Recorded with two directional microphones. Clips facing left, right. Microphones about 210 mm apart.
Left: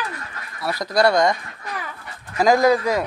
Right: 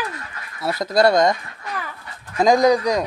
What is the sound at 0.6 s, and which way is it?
Speech, 25° right (ahead or behind).